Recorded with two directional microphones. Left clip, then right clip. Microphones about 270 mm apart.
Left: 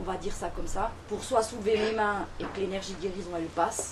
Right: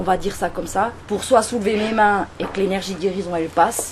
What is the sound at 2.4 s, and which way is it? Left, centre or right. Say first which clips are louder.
Speech: right 10 dB; right.